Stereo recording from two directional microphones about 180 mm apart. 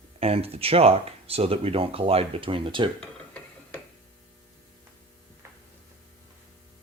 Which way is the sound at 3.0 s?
5° left (ahead or behind).